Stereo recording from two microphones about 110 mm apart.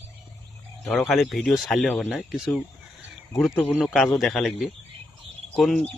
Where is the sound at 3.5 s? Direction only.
20° left (ahead or behind).